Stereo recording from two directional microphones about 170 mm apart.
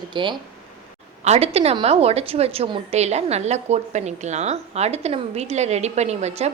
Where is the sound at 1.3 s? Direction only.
40° right (ahead or behind).